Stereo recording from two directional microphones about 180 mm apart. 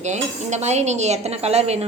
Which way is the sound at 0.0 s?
40° right (ahead or behind).